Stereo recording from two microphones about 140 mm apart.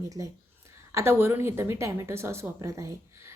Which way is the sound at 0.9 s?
15° right (ahead or behind).